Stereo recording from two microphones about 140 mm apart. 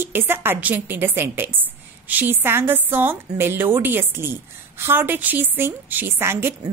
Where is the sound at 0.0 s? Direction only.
15° right (ahead or behind).